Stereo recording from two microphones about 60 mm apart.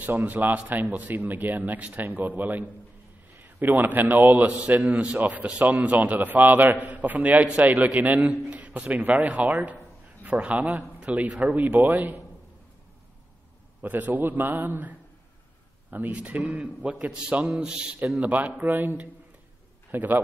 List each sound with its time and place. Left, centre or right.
0.0 s a man's voice: right
10.5 s a man's voice: right
13.7 s a man's voice: right
18.2 s a man's voice: right
19.9 s a man's voice: right